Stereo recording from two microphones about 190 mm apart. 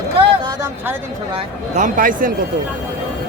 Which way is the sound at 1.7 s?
45° right (ahead or behind).